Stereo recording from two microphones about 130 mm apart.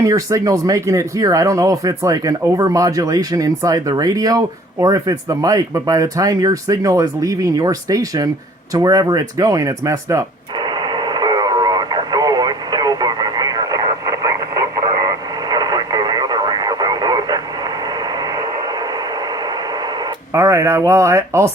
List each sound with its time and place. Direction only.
0.0 s speech: 25° right (ahead or behind)
10.6 s radio: 35° right (ahead or behind)
15.4 s radio: 30° right (ahead or behind)
20.3 s speech: 20° right (ahead or behind)